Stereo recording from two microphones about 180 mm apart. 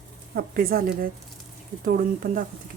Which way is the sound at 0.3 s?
55° right (ahead or behind).